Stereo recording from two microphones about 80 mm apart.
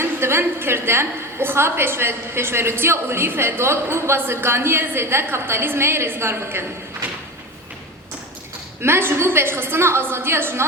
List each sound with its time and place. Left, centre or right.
0.0 s a woman's voice: right
8.8 s a woman's voice: right